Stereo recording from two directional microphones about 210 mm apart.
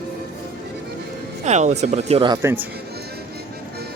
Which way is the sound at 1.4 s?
35° right (ahead or behind).